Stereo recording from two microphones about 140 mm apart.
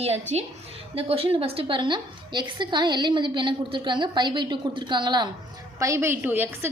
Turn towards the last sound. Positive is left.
turn(degrees=-15)  # may be behind; listen again after turning